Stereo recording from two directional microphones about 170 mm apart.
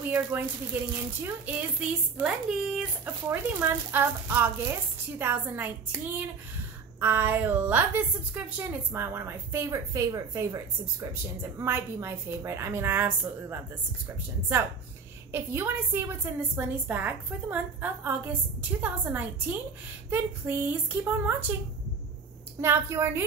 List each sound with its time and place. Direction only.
0.0 s a woman's voice: 10° right (ahead or behind)
15.3 s a woman's voice: 15° right (ahead or behind)
22.6 s a woman's voice: 15° right (ahead or behind)